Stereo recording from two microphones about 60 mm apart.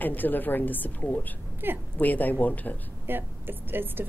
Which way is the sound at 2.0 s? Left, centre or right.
Left.